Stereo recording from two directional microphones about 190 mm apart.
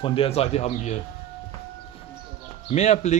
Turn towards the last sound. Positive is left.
turn(degrees=35)  # may be behind; listen again after turning